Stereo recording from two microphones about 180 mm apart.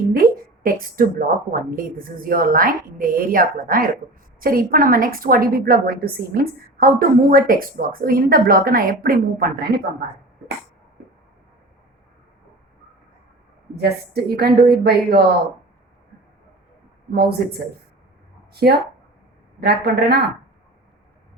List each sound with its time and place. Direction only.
0.1 s a woman's voice: 55° right (ahead or behind)
13.7 s a woman's voice: 60° right (ahead or behind)
17.2 s a woman's voice: 60° right (ahead or behind)